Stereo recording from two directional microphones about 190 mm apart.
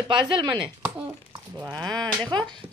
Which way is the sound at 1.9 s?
25° right (ahead or behind).